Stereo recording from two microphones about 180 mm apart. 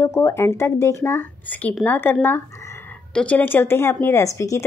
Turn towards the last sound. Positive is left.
turn(degrees=15)  # may be behind; listen again after turning